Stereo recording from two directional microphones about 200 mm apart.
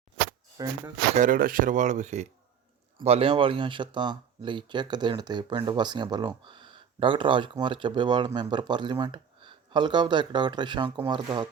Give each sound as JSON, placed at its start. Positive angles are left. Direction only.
{"t": 0.6, "sound": "speech", "side_deg": -20}
{"t": 1.1, "sound": "speech", "side_deg": -40}